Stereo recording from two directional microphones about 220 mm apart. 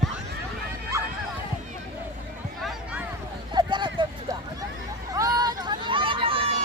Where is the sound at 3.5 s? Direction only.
20° right (ahead or behind).